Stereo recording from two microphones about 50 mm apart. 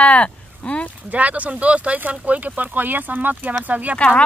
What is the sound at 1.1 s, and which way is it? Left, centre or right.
Speech, right.